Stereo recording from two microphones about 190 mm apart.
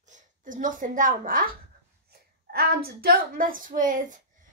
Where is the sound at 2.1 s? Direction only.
55° right (ahead or behind).